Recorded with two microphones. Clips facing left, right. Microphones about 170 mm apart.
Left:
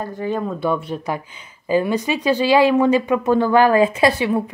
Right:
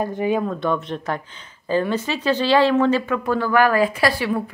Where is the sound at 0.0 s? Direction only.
15° right (ahead or behind).